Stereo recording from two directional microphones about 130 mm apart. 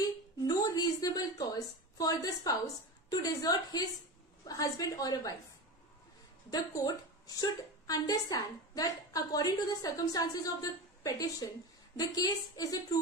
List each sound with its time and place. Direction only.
0.5 s a sound: 30° left (ahead or behind)
3.1 s a woman's voice: 25° left (ahead or behind)
6.5 s a woman's voice: 30° left (ahead or behind)